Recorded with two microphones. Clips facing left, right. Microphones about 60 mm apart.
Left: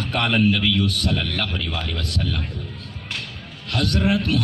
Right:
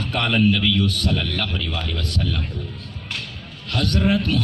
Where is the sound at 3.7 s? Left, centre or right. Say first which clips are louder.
Right 1 dB; left.